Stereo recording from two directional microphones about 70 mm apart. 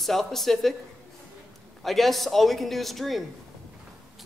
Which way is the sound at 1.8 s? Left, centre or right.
Centre.